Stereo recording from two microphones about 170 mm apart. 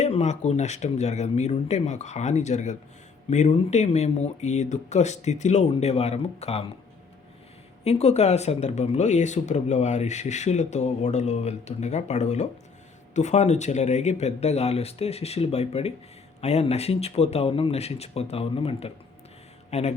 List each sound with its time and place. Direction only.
0.0 s speech: 40° left (ahead or behind)
7.9 s speech: 40° left (ahead or behind)